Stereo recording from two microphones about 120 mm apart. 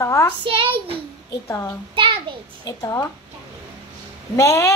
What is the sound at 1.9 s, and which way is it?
Child singing, 45° right (ahead or behind).